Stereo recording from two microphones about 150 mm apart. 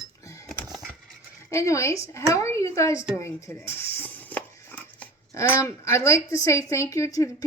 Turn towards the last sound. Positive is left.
turn(degrees=20)  # may be behind; listen again after turning